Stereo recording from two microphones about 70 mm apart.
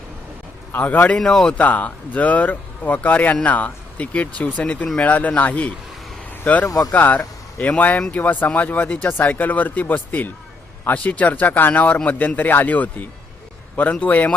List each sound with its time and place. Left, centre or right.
0.7 s speech: left
1.2 s speech: centre
1.5 s speech: left
6.7 s speech: left
6.9 s speech: left